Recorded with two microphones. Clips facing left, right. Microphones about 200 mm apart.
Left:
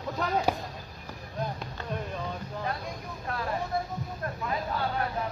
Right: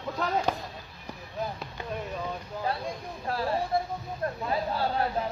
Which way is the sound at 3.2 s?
30° right (ahead or behind).